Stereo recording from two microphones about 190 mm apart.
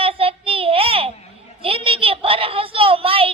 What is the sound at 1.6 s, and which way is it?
Child singing, 30° right (ahead or behind).